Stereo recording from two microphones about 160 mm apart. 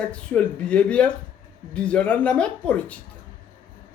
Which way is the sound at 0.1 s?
5° left (ahead or behind).